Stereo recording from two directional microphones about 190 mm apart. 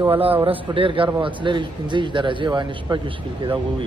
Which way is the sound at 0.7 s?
25° right (ahead or behind).